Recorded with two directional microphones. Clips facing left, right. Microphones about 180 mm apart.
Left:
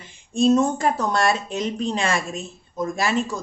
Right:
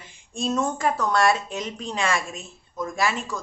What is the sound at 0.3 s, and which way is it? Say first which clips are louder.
Speech: left 8 dB; 25° left (ahead or behind).